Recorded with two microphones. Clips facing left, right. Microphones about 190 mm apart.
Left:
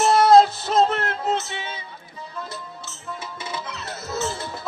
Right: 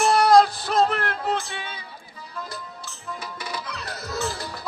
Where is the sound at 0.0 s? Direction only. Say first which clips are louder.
Left 2 dB; 25° left (ahead or behind).